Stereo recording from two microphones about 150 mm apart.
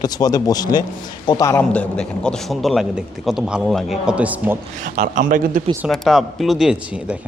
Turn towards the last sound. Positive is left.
turn(degrees=-5)  # may be behind; listen again after turning